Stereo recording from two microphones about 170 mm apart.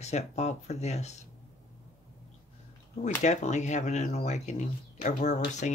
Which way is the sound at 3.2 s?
45° left (ahead or behind).